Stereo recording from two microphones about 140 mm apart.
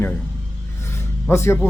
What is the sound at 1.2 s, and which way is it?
Speech, 20° left (ahead or behind).